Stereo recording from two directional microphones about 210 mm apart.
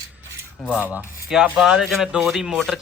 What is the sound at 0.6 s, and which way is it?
Rub, 5° right (ahead or behind).